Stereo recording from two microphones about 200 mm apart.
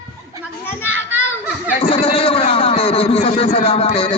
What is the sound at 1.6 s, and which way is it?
Speech, 30° left (ahead or behind).